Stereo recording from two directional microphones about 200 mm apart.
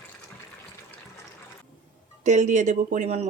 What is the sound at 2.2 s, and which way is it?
Speech, 35° right (ahead or behind).